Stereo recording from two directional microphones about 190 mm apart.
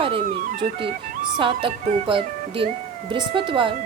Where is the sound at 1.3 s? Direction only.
25° right (ahead or behind).